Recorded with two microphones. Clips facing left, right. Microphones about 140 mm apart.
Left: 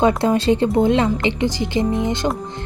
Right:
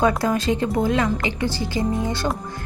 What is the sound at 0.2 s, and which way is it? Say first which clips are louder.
Speech: left 5 dB; 30° left (ahead or behind).